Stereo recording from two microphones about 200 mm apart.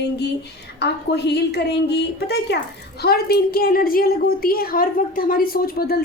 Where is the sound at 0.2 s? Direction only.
55° left (ahead or behind).